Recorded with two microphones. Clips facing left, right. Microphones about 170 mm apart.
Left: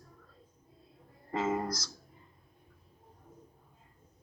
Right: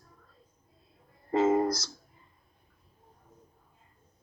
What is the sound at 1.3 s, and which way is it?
Speech, 35° right (ahead or behind).